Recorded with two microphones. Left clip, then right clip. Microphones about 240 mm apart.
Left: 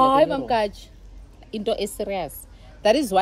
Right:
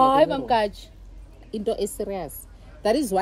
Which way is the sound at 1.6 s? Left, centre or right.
Centre.